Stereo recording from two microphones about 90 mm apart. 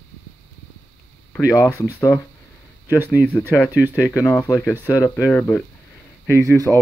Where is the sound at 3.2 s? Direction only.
25° left (ahead or behind).